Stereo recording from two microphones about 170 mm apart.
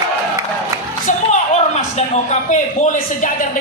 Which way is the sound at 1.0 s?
40° left (ahead or behind).